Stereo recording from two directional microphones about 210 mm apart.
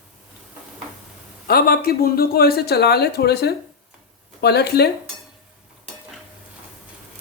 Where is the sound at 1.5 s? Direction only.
45° left (ahead or behind).